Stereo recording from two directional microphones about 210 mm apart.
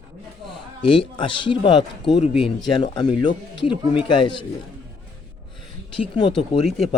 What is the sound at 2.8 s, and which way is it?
Speech, 20° left (ahead or behind).